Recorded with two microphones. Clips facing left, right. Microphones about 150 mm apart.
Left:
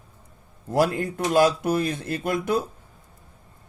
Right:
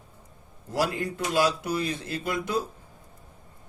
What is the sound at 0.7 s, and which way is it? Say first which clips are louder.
Speech: left 5 dB; 50° left (ahead or behind).